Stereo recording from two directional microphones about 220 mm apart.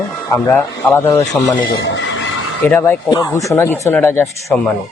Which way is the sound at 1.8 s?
55° left (ahead or behind).